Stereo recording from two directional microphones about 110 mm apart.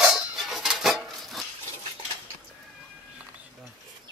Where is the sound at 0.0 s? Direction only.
5° right (ahead or behind).